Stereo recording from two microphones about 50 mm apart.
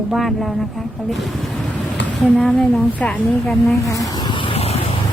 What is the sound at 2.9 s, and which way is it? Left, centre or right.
Speech, left.